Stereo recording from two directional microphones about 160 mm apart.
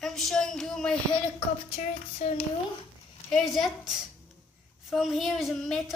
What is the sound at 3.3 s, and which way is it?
A woman's voice, centre (ahead or behind).